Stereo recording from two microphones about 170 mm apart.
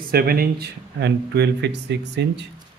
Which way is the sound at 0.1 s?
60° right (ahead or behind).